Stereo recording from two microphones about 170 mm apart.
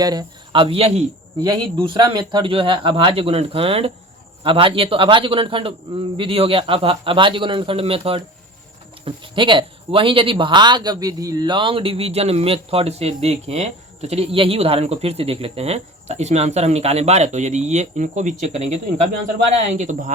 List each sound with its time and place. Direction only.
0.0 s speech: 25° right (ahead or behind); by 20.1 s 45° right (ahead or behind)